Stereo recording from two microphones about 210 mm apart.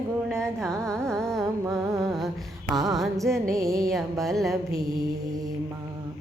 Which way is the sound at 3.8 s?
Centre (ahead or behind).